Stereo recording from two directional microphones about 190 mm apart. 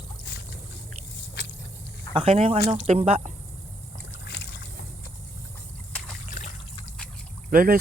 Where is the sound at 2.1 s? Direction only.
30° right (ahead or behind).